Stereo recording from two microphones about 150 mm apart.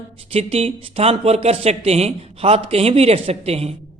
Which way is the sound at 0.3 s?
40° right (ahead or behind).